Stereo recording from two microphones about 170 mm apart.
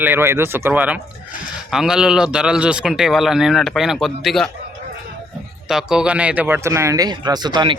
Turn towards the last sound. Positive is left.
turn(degrees=-25)  # may be behind; listen again after turning